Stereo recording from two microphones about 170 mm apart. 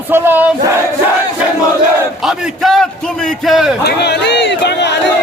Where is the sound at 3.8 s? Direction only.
75° left (ahead or behind).